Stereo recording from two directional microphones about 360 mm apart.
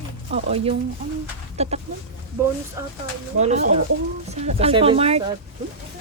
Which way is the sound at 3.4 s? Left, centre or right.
Centre.